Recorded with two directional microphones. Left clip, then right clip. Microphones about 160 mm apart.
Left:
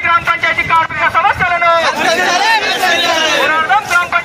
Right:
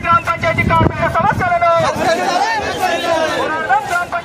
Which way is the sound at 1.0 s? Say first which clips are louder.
Left 3 dB; 90° right.